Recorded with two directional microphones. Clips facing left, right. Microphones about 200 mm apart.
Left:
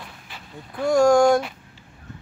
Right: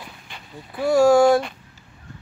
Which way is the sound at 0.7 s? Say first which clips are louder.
Right 1 dB; 5° right (ahead or behind).